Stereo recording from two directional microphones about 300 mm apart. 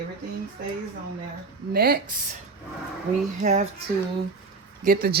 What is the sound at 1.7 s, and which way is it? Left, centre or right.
Speech, right.